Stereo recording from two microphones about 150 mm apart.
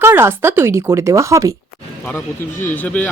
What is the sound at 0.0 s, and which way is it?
Speech, 15° right (ahead or behind).